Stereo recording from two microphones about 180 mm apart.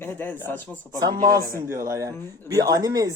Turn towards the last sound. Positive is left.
turn(degrees=-20)  # may be behind; listen again after turning